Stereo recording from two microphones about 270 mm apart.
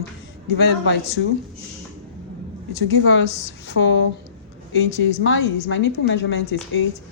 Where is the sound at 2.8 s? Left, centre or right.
Left.